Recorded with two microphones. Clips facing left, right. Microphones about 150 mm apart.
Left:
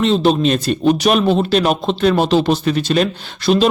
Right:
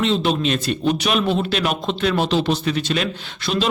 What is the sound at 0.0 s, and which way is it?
A man's voice, 40° left (ahead or behind).